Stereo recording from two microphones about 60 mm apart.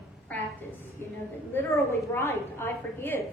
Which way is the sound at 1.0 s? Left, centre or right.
Left.